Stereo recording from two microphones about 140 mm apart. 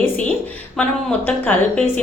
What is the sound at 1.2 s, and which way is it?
Speech, 10° left (ahead or behind).